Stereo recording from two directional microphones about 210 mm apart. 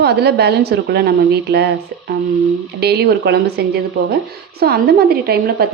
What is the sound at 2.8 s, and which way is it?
A woman's voice, 50° right (ahead or behind).